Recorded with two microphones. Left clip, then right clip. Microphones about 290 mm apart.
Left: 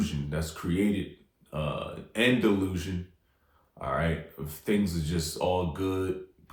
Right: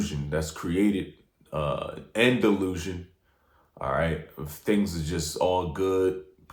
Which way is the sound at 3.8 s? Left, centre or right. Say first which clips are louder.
Right 3 dB; right.